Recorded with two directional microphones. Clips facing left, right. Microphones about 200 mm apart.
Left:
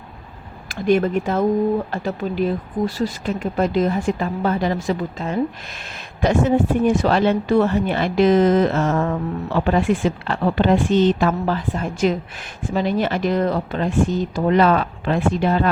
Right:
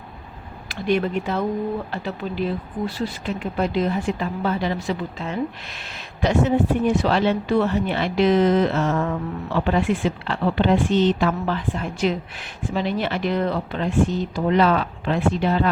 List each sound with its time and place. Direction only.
0.7 s speech: 45° left (ahead or behind)